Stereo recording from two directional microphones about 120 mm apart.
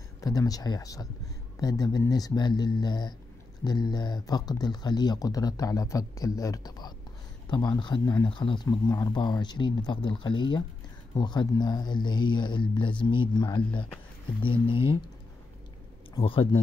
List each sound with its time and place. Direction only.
0.2 s speech: 30° left (ahead or behind)
8.6 s speech: 30° left (ahead or behind); by 15.0 s 50° left (ahead or behind)
16.2 s speech: 50° left (ahead or behind)